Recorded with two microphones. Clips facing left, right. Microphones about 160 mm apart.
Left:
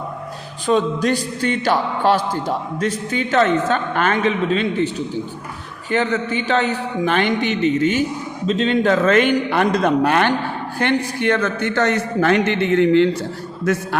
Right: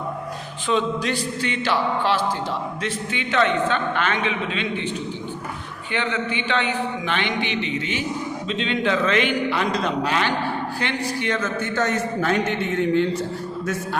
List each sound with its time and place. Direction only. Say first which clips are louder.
0.7 s speech: left 5 dB; 45° left (ahead or behind)
5.9 s speech: left 6 dB; 40° left (ahead or behind)
11.2 s a man's voice: left 6 dB; 60° left (ahead or behind); by 13.1 s 80° left